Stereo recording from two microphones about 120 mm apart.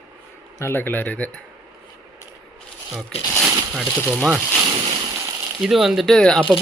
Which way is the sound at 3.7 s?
Centre (ahead or behind).